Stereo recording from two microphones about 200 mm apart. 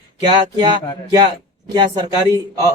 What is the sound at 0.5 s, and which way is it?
Speech, 20° right (ahead or behind).